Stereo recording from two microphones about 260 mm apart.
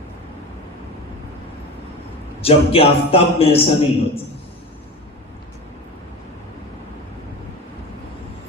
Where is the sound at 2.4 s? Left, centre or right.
Left.